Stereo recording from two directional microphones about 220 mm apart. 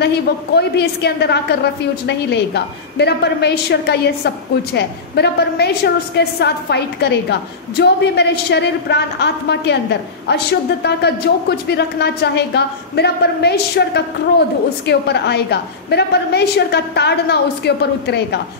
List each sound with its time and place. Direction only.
0.0 s a woman's voice: 50° left (ahead or behind)